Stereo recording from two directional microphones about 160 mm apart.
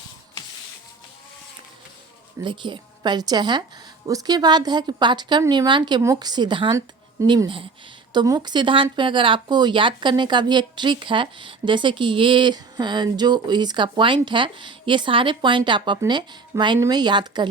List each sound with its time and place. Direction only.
2.4 s a woman's voice: 30° right (ahead or behind)